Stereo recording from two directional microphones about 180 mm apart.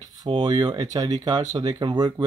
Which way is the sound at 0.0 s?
25° right (ahead or behind).